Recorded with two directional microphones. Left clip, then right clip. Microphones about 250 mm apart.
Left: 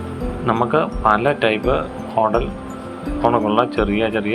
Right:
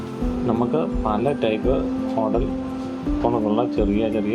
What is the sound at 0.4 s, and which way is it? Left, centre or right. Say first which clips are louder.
Speech: left 5 dB; left.